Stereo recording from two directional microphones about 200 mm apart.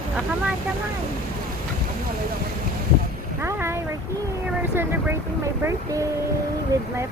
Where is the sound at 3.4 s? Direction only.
15° right (ahead or behind).